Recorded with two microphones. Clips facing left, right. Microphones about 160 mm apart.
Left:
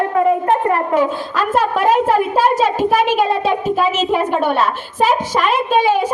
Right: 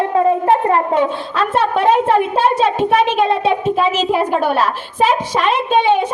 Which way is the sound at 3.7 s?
Centre (ahead or behind).